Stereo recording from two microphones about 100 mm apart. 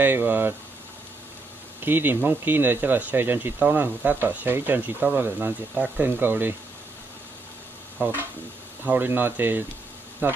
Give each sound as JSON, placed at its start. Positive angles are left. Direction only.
{"t": 0.0, "sound": "speech", "side_deg": -20}
{"t": 1.8, "sound": "speech", "side_deg": -20}
{"t": 8.0, "sound": "speech", "side_deg": -20}